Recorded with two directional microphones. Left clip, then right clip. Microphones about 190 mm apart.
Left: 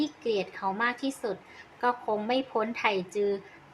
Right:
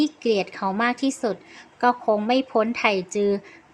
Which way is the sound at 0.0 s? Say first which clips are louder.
Right 7 dB; 35° right (ahead or behind).